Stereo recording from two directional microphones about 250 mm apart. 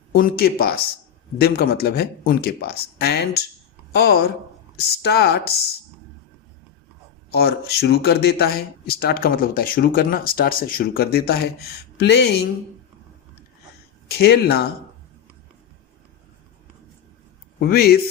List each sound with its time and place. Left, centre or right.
0.1 s speech: left
7.3 s speech: left
14.1 s speech: left
17.6 s speech: left